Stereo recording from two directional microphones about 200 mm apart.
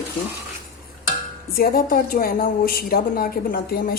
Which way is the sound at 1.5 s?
50° left (ahead or behind).